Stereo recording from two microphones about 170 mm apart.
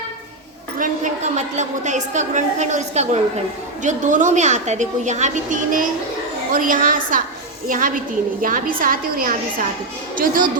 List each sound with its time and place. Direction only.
0.8 s a woman's voice: 40° right (ahead or behind)